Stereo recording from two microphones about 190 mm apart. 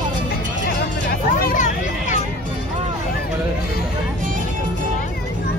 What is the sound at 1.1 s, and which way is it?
Hubbub, 50° left (ahead or behind).